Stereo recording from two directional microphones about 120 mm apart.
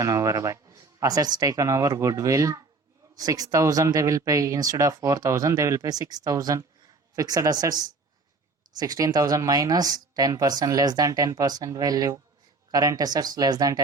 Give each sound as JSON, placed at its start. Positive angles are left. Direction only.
{"t": 0.0, "sound": "speech", "side_deg": -25}